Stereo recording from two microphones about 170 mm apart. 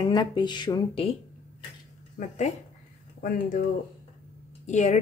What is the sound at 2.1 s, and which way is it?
A woman's voice, 45° left (ahead or behind).